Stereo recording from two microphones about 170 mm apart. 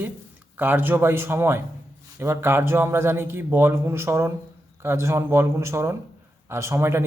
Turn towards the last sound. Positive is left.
turn(degrees=-15)  # may be behind; listen again after turning